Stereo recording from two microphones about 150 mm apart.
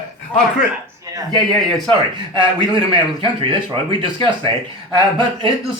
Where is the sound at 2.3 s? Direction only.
35° right (ahead or behind).